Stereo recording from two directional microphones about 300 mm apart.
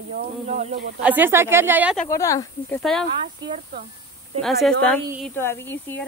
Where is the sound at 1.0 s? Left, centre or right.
Centre.